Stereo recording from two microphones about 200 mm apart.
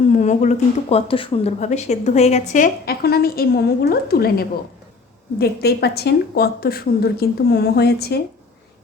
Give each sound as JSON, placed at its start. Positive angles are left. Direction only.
{"t": 0.1, "sound": "speech", "side_deg": 35}
{"t": 2.8, "sound": "speech", "side_deg": 50}